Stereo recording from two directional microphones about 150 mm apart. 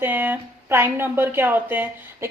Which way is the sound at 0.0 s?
15° right (ahead or behind).